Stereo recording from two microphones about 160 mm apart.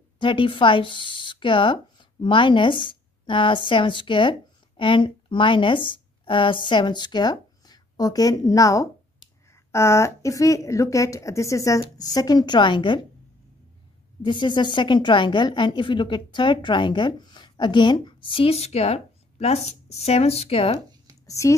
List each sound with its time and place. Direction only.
0.2 s a woman's voice: 30° left (ahead or behind)
14.2 s a woman's voice: 30° left (ahead or behind)
21.3 s speech: 20° left (ahead or behind)